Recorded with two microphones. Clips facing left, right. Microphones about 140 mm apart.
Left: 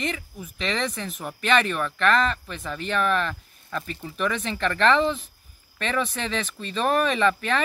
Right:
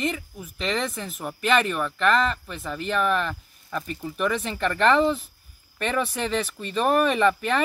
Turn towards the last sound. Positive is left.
turn(degrees=-5)  # may be behind; listen again after turning